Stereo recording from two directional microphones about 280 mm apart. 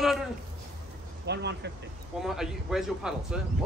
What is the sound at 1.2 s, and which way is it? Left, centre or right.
Speech, right.